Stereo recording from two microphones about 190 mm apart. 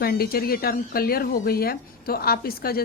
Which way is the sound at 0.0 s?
55° left (ahead or behind).